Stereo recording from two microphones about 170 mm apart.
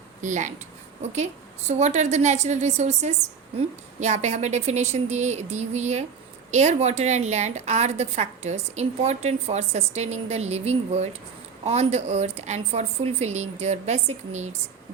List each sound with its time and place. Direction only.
0.2 s a woman's voice: 45° right (ahead or behind)